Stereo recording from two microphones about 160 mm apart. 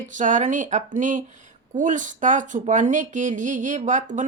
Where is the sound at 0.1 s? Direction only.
50° right (ahead or behind).